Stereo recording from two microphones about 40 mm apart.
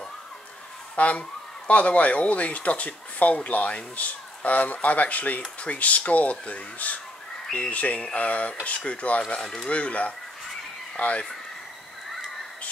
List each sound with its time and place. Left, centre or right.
0.9 s speech: left